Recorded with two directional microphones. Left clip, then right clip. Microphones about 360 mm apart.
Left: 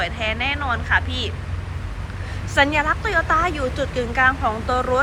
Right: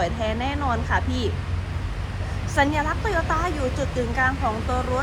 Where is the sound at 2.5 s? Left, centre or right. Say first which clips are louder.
Left 4 dB; centre.